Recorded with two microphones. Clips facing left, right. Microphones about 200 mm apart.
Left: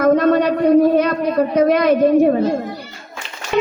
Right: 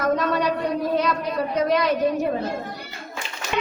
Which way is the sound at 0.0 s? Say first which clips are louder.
Left 9 dB; 55° left (ahead or behind).